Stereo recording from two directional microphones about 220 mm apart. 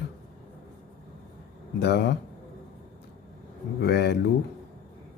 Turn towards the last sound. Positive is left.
turn(degrees=50)  # may be behind; listen again after turning